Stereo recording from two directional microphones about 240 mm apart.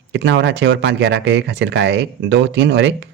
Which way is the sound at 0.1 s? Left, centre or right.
Right.